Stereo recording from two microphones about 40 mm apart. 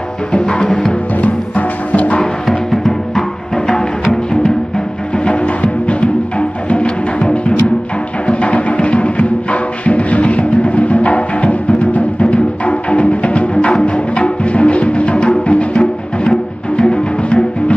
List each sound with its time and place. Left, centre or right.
0.3 s music: centre
1.2 s music: left
2.4 s music: centre
3.5 s music: centre